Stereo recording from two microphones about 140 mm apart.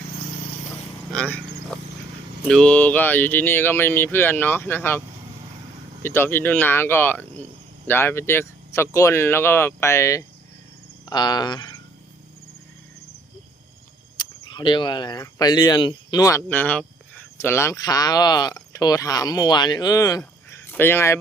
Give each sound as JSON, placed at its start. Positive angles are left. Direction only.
{"t": 1.1, "sound": "a sound", "side_deg": 5}
{"t": 2.5, "sound": "speech", "side_deg": 5}
{"t": 14.4, "sound": "speech", "side_deg": 35}
{"t": 16.5, "sound": "speech", "side_deg": 10}